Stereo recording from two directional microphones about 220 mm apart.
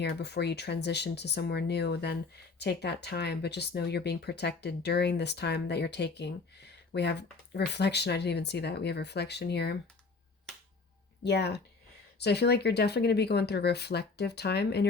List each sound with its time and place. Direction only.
0.0 s speech: 50° left (ahead or behind)
11.2 s speech: 50° left (ahead or behind)